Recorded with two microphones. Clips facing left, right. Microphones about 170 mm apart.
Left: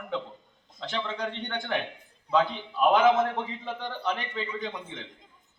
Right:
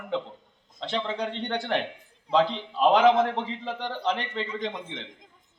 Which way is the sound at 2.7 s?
30° right (ahead or behind).